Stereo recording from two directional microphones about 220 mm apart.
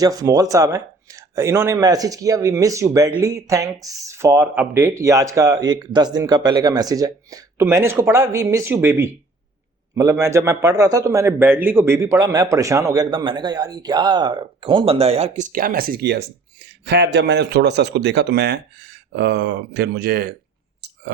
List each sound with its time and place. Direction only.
0.0 s a man's voice: 15° right (ahead or behind); by 20.3 s 45° right (ahead or behind)